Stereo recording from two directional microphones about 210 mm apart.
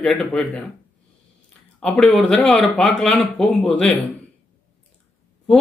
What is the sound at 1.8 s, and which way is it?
A man's voice, 5° left (ahead or behind).